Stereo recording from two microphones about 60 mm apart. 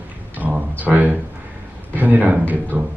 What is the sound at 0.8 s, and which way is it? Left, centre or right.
Speech, right.